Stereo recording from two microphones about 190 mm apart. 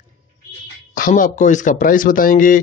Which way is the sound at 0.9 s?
45° left (ahead or behind).